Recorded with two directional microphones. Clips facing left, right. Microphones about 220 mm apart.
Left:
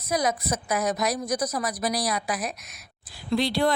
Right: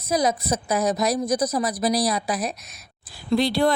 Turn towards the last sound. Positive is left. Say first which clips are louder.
# right 3 dB
turn(degrees=-40)  # may be behind; listen again after turning